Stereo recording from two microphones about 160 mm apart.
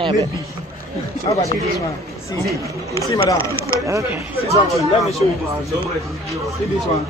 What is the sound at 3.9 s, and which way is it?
Speech, 20° right (ahead or behind).